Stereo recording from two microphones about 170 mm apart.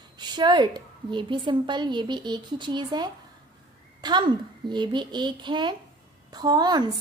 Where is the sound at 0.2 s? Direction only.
25° right (ahead or behind).